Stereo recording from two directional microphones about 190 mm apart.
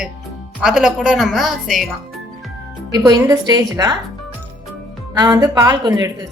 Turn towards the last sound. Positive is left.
turn(degrees=-20)  # may be behind; listen again after turning